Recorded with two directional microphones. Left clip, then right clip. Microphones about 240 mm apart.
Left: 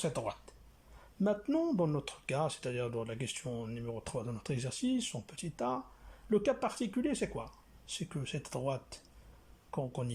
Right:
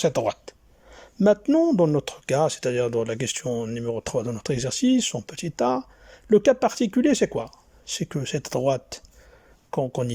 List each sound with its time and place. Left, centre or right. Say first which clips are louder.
0.0 s speech: right 14 dB; right